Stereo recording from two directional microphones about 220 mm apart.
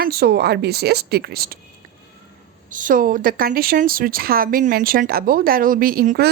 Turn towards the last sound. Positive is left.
turn(degrees=-45)  # may be behind; listen again after turning